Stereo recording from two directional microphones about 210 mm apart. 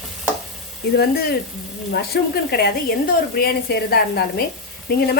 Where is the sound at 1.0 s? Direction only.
50° left (ahead or behind).